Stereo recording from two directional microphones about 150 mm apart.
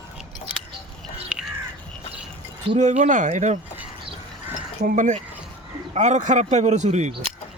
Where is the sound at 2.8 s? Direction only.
50° right (ahead or behind).